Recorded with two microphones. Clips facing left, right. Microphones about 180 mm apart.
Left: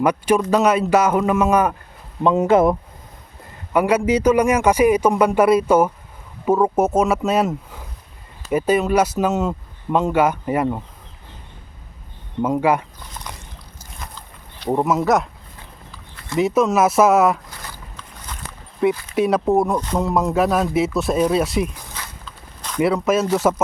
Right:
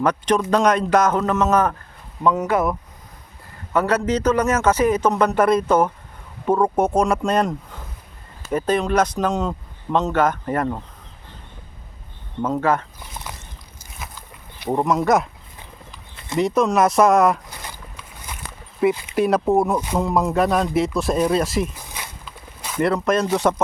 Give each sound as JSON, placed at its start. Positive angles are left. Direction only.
{"t": 0.0, "sound": "speech", "side_deg": 10}
{"t": 2.2, "sound": "speech", "side_deg": 25}
{"t": 3.7, "sound": "speech", "side_deg": 10}
{"t": 12.4, "sound": "speech", "side_deg": 10}
{"t": 14.0, "sound": "walk", "side_deg": -10}
{"t": 14.7, "sound": "speech", "side_deg": 5}
{"t": 15.9, "sound": "a sound", "side_deg": -20}
{"t": 16.4, "sound": "speech", "side_deg": 5}
{"t": 17.6, "sound": "a sound", "side_deg": -15}
{"t": 19.1, "sound": "speech", "side_deg": 0}
{"t": 21.9, "sound": "walk", "side_deg": -15}
{"t": 22.8, "sound": "speech", "side_deg": 5}